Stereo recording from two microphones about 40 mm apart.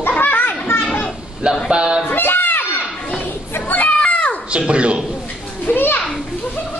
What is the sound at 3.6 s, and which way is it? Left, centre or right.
Children playing, left.